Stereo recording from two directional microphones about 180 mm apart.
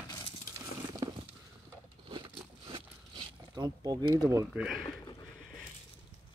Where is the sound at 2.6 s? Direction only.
25° right (ahead or behind).